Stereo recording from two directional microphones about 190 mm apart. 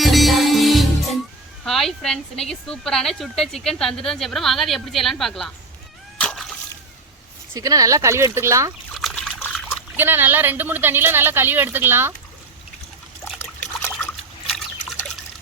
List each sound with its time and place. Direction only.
0.0 s music: centre (ahead or behind)
1.6 s speech: centre (ahead or behind)
6.1 s water: 5° left (ahead or behind)
7.5 s a woman's voice: 20° right (ahead or behind)
9.0 s trickle: 5° left (ahead or behind)
10.0 s a woman's voice: 10° right (ahead or behind)
13.4 s trickle: 15° left (ahead or behind)
14.4 s liquid: centre (ahead or behind)